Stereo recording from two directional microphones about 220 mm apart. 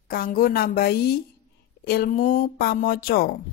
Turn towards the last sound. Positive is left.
turn(degrees=45)  # may be behind; listen again after turning